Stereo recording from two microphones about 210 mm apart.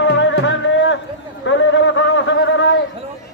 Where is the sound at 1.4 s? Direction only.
60° left (ahead or behind).